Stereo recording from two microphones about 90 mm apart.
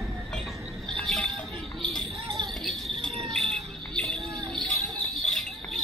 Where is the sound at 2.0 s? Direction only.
55° right (ahead or behind).